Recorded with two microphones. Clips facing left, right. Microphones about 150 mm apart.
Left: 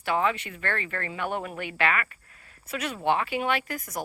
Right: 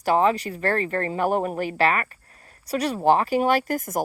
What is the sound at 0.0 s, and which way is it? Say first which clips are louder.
Speech: right 6 dB; 40° right (ahead or behind).